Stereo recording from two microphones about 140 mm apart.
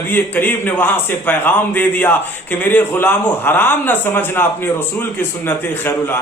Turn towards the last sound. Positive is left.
turn(degrees=15)  # may be behind; listen again after turning